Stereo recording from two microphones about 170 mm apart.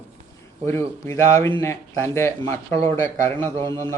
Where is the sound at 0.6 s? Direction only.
15° left (ahead or behind).